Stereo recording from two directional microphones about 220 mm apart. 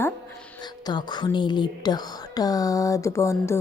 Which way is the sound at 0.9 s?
20° left (ahead or behind).